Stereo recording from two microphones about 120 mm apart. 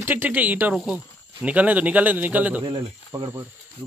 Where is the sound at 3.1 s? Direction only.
20° right (ahead or behind).